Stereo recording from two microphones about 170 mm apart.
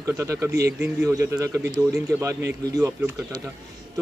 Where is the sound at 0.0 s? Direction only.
20° right (ahead or behind).